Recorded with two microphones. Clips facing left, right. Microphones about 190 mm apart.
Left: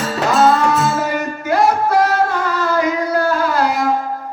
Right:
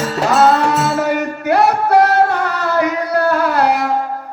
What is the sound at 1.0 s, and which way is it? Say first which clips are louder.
Music: right 3 dB; 65° right (ahead or behind).